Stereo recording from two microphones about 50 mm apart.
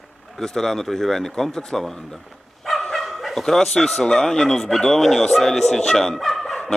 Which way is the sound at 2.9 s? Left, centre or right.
Centre.